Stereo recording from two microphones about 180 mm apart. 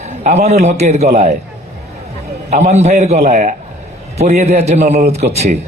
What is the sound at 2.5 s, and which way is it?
A man's voice, 40° right (ahead or behind).